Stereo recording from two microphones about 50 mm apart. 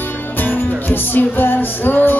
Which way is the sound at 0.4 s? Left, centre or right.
Left.